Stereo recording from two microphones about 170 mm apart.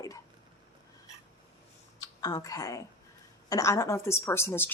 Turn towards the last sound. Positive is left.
turn(degrees=15)  # may be behind; listen again after turning